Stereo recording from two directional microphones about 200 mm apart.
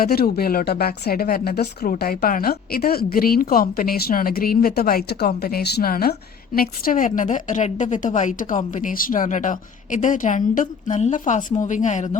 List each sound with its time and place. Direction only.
0.0 s a woman's voice: 50° left (ahead or behind)